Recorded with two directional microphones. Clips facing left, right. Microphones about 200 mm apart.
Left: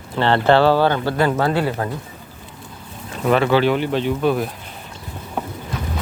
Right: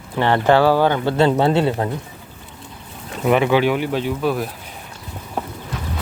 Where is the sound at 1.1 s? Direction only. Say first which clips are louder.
Right 3 dB; 25° right (ahead or behind).